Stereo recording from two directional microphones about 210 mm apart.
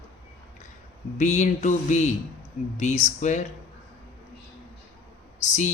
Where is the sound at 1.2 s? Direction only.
35° left (ahead or behind).